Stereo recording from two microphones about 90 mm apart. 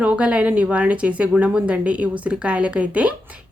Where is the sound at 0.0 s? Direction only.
15° right (ahead or behind).